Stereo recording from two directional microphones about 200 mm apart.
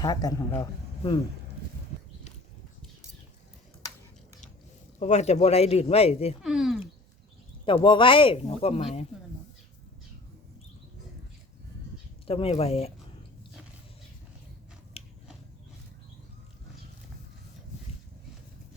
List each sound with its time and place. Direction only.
0.0 s a man's voice: 20° left (ahead or behind)
4.9 s a man's voice: 35° left (ahead or behind)
6.4 s speech: centre (ahead or behind)
7.6 s speech: 25° left (ahead or behind)
12.2 s speech: 30° left (ahead or behind)
15.0 s biting: 30° left (ahead or behind)